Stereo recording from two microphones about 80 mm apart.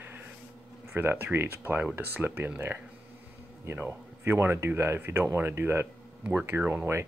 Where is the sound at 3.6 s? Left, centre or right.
Right.